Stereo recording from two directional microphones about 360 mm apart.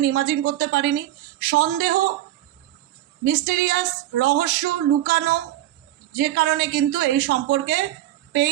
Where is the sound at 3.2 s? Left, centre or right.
Right.